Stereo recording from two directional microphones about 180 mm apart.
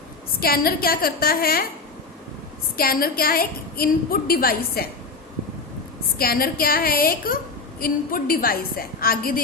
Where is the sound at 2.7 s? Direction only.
55° left (ahead or behind).